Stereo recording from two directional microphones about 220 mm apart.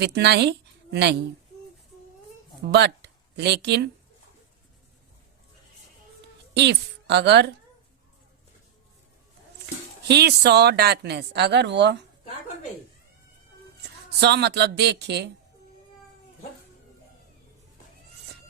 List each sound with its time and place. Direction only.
0.0 s a woman's voice: 50° right (ahead or behind)
2.7 s speech: 50° right (ahead or behind)
6.5 s a woman's voice: 50° right (ahead or behind)
10.1 s speech: 50° right (ahead or behind)
14.2 s speech: 50° right (ahead or behind)